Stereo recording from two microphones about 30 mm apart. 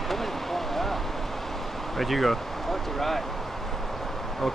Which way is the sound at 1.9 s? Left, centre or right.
Centre.